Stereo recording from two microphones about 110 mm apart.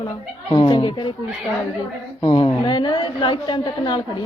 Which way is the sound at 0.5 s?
45° left (ahead or behind).